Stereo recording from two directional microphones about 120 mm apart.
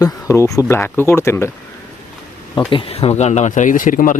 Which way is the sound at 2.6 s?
45° left (ahead or behind).